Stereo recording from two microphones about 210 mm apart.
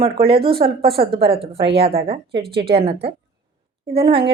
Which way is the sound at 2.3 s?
50° right (ahead or behind).